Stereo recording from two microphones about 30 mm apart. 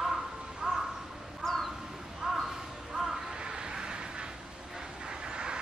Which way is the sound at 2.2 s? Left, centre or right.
Centre.